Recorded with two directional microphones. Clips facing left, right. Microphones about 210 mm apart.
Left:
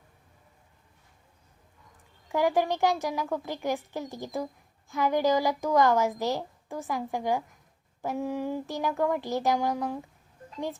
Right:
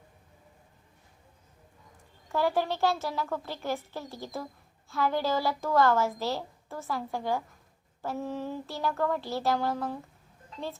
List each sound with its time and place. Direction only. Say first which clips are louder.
2.3 s speech: left 2 dB; 15° left (ahead or behind)